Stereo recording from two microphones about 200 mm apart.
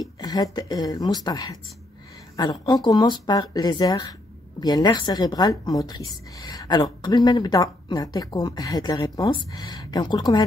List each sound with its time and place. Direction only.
0.2 s a woman's voice: 20° left (ahead or behind)